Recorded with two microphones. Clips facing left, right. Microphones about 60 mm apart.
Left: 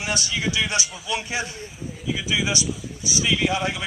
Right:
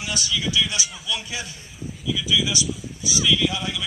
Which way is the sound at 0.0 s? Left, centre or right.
Left.